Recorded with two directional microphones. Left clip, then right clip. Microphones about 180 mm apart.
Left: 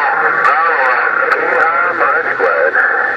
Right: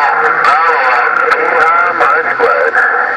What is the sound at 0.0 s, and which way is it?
Radio, 45° right (ahead or behind).